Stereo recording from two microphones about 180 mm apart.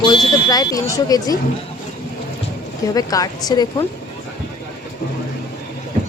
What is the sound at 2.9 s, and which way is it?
Speech, 20° left (ahead or behind).